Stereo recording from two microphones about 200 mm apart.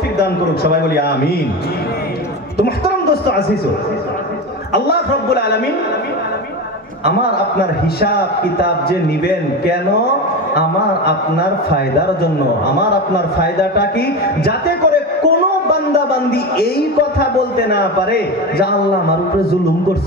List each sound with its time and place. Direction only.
0.2 s speech: 50° left (ahead or behind)
2.5 s speech: 50° left (ahead or behind)
4.7 s speech: 50° left (ahead or behind)
7.1 s speech: 50° left (ahead or behind)
13.4 s speech: 50° left (ahead or behind)